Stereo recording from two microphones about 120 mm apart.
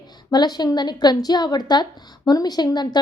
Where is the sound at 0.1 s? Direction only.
35° left (ahead or behind).